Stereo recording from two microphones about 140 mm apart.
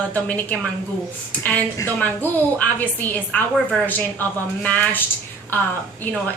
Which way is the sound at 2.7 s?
10° left (ahead or behind).